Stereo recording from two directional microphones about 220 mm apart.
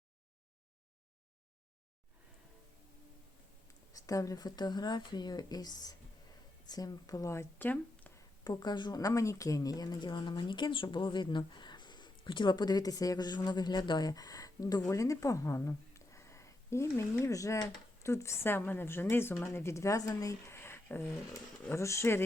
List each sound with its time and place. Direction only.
3.9 s speech: 15° left (ahead or behind)